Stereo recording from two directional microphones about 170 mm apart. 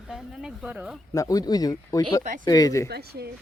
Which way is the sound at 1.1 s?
20° left (ahead or behind).